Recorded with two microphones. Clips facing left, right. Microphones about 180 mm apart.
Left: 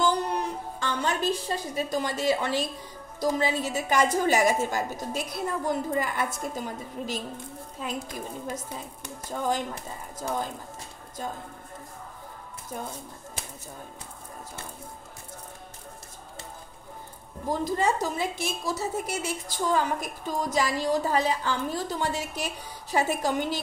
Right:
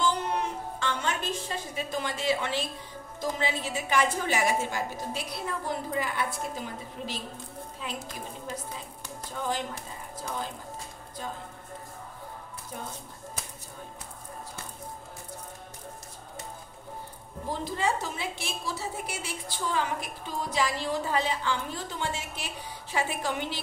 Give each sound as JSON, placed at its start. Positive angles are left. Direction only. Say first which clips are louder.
{"t": 0.0, "sound": "a sound", "louder": "left 2 dB", "side_deg": 40}
{"t": 3.2, "sound": "a woman's voice", "louder": "left 5 dB", "side_deg": 40}
{"t": 17.5, "sound": "a woman's voice", "louder": "left 4 dB", "side_deg": 45}